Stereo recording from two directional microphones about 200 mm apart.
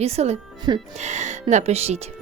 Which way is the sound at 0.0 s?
30° right (ahead or behind).